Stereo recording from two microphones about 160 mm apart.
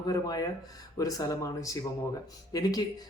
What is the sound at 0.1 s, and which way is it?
Speech, 25° left (ahead or behind).